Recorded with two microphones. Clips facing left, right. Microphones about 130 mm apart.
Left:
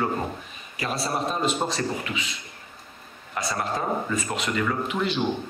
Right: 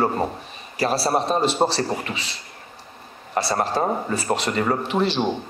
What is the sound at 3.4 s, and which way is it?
Speech, 35° right (ahead or behind).